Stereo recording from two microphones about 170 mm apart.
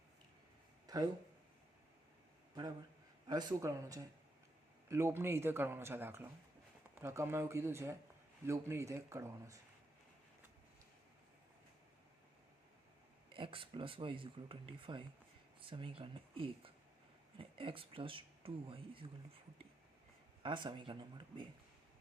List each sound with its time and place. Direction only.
3.2 s speech: 20° right (ahead or behind)
13.3 s speech: 30° right (ahead or behind)
20.4 s speech: 30° right (ahead or behind)